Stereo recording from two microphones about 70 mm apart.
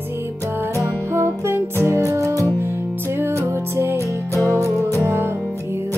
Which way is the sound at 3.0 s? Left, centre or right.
Right.